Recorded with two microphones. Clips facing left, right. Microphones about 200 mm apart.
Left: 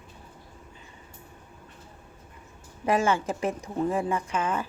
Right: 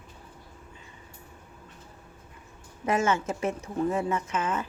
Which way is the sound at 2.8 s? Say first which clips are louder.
Left 1 dB; 30° left (ahead or behind).